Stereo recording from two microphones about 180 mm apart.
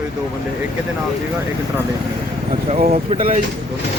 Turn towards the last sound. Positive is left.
turn(degrees=-30)  # may be behind; listen again after turning